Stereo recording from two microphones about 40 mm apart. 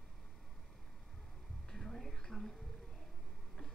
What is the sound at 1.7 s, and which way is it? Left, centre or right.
Music, centre.